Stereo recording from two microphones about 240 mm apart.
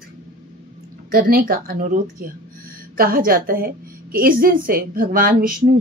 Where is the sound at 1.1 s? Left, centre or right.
Right.